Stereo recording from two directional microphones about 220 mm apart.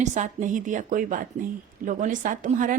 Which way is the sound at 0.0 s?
35° right (ahead or behind).